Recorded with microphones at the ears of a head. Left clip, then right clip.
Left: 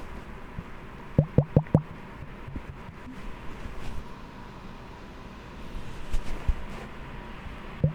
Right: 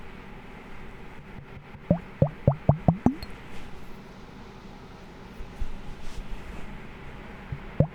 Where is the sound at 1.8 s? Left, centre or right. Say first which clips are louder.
Right 16 dB; right.